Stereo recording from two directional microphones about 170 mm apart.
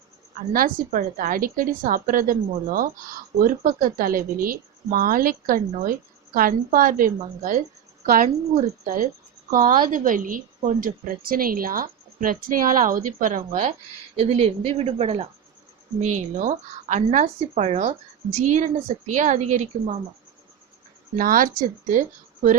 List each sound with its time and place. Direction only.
0.5 s a woman's voice: 55° right (ahead or behind)
14.2 s a woman's voice: 35° right (ahead or behind)
16.0 s a woman's voice: 45° right (ahead or behind)
21.2 s a woman's voice: 55° right (ahead or behind)